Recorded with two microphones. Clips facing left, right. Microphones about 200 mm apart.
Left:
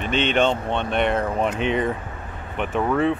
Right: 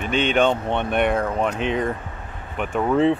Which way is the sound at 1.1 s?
Centre (ahead or behind).